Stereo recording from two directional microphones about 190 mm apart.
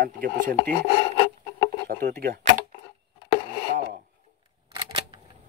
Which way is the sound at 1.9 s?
50° right (ahead or behind).